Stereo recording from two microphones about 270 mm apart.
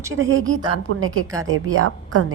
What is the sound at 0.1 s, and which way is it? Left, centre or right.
A woman's voice, right.